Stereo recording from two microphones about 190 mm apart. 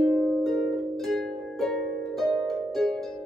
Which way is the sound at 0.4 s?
Centre (ahead or behind).